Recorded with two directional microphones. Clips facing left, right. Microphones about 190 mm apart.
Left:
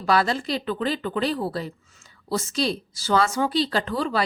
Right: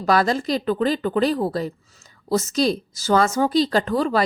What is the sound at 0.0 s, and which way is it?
A woman's voice, 45° right (ahead or behind).